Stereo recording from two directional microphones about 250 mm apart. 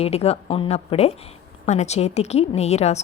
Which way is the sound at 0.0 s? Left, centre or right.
Left.